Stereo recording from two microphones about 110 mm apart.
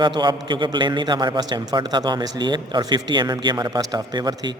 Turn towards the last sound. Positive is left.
turn(degrees=-40)  # may be behind; listen again after turning